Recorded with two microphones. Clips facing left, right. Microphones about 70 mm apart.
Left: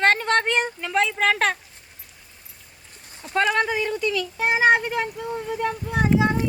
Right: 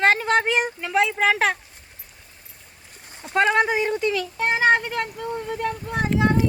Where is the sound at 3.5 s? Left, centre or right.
Right.